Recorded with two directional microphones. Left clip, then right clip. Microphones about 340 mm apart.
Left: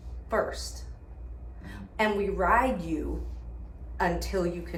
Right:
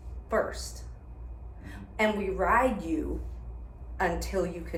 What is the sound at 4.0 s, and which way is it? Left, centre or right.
Speech, centre.